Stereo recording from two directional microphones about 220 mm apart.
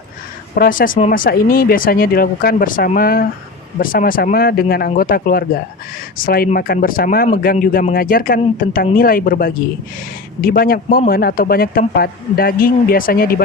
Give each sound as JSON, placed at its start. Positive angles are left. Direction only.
{"t": 0.5, "sound": "speech", "side_deg": 40}